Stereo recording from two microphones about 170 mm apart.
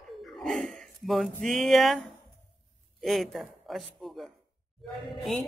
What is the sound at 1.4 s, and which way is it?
Music, centre (ahead or behind).